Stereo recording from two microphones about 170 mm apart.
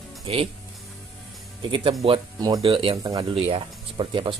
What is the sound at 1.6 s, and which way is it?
Speech, 30° right (ahead or behind).